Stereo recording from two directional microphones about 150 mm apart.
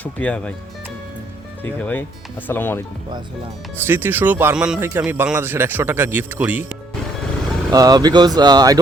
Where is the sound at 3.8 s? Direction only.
15° right (ahead or behind).